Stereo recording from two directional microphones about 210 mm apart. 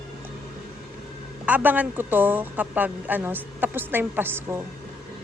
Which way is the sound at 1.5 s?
5° right (ahead or behind).